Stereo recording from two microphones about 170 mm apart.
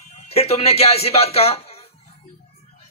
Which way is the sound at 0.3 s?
35° left (ahead or behind).